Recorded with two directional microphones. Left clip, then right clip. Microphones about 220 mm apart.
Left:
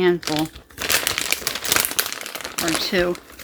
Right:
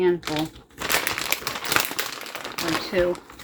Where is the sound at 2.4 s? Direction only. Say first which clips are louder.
Left 3 dB; 20° left (ahead or behind).